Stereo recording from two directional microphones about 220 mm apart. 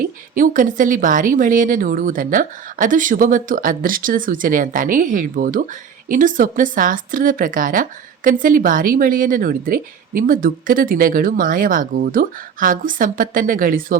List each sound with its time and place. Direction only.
0.0 s speech: 40° right (ahead or behind)